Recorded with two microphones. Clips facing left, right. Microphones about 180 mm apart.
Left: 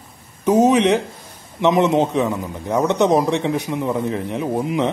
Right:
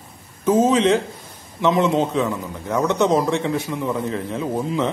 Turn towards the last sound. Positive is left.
turn(degrees=20)  # may be behind; listen again after turning